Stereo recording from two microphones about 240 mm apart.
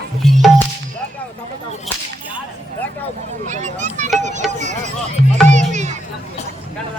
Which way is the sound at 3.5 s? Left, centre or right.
Right.